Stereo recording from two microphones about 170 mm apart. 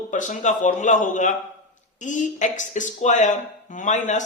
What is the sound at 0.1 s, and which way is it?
Speech, 45° left (ahead or behind).